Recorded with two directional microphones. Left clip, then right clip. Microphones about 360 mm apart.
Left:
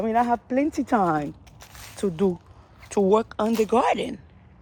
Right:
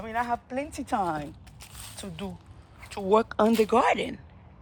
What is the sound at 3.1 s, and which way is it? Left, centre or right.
Speech, centre.